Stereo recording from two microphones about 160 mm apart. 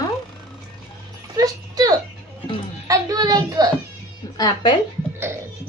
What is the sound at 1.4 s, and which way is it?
Dog, 20° right (ahead or behind).